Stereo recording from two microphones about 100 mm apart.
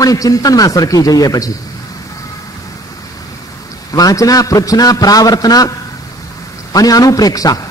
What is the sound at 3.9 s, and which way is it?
A man's voice, 35° left (ahead or behind).